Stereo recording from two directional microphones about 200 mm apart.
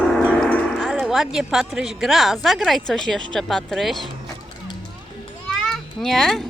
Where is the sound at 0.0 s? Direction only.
5° left (ahead or behind).